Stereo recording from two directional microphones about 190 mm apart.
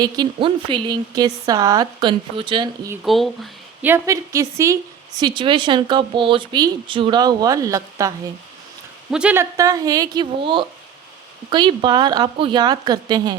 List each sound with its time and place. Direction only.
0.0 s a woman's voice: 25° right (ahead or behind)
2.9 s speech: centre (ahead or behind)
3.8 s a woman's voice: 15° right (ahead or behind)
9.0 s a woman's voice: 5° right (ahead or behind); by 13.3 s 20° right (ahead or behind)